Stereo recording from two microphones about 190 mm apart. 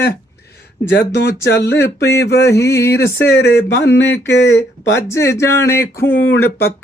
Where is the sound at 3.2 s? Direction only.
65° left (ahead or behind).